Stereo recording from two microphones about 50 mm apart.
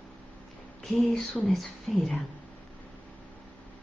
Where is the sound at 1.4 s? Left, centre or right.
Centre.